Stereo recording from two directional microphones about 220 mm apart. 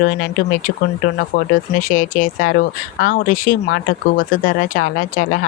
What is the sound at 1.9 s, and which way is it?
Speech, 40° left (ahead or behind).